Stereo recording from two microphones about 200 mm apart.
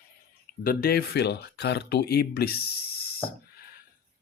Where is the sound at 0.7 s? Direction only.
50° left (ahead or behind).